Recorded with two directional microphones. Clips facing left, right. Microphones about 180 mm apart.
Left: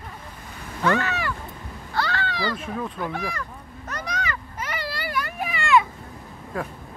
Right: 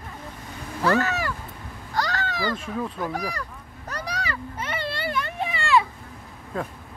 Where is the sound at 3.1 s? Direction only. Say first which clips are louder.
Even; 40° right (ahead or behind).